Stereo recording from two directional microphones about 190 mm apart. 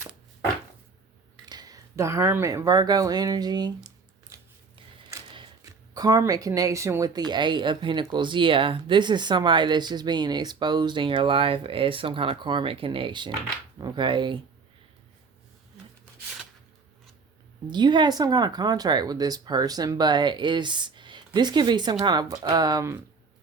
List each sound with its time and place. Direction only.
1.5 s speech: 20° right (ahead or behind)
4.3 s a sound: 15° right (ahead or behind)
5.9 s speech: 20° right (ahead or behind)
17.7 s speech: 25° right (ahead or behind)